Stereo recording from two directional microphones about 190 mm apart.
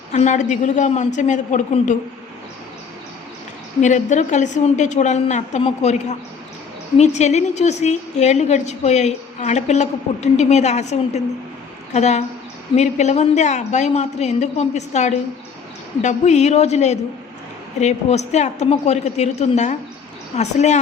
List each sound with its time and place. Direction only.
0.1 s a woman's voice: 40° left (ahead or behind)
3.8 s a woman's voice: 40° left (ahead or behind)